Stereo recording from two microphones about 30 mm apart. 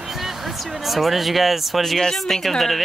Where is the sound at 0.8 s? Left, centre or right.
Centre.